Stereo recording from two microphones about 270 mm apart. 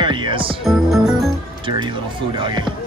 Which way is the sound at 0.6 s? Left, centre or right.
Centre.